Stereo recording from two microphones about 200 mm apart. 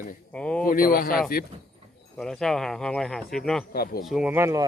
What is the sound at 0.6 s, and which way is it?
Speech, 45° left (ahead or behind).